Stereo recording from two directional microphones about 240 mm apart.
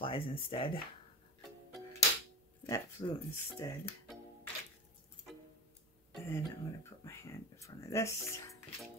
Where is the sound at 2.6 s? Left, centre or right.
Centre.